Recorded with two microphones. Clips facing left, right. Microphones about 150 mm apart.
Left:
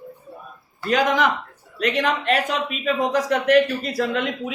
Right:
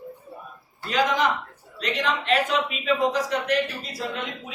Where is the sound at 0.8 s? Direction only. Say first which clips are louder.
Left 3 dB; 55° left (ahead or behind); by 4.5 s 70° left (ahead or behind).